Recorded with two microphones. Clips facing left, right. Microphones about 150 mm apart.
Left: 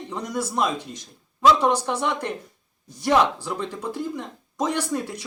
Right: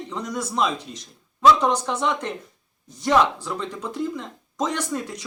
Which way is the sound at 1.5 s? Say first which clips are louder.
Left 1 dB; 10° left (ahead or behind).